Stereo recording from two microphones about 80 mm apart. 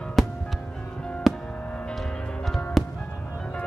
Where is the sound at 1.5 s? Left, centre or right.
Centre.